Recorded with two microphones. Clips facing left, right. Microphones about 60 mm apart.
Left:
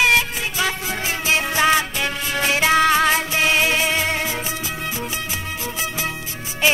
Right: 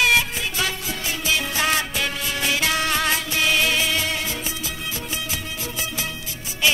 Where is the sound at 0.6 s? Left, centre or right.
Left.